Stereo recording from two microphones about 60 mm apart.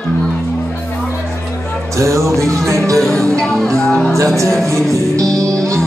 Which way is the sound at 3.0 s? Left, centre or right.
Centre.